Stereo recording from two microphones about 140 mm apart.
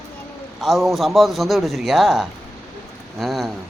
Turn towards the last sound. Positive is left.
turn(degrees=0)  # may be behind; listen again after turning